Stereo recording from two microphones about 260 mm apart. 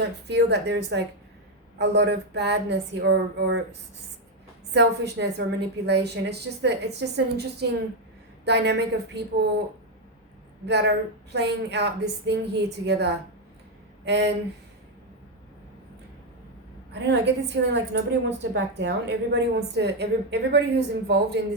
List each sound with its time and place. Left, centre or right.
0.3 s a woman's voice: right
4.7 s a woman's voice: right
10.7 s a woman's voice: right
16.9 s a woman's voice: right